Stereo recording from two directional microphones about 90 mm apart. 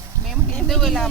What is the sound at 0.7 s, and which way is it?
Speech, centre (ahead or behind).